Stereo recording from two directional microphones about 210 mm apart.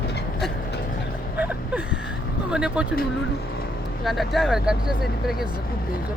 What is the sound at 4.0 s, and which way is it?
Speech, centre (ahead or behind).